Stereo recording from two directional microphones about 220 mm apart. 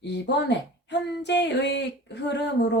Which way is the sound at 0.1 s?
50° left (ahead or behind).